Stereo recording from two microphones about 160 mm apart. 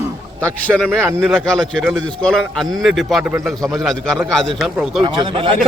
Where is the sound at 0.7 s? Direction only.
5° left (ahead or behind).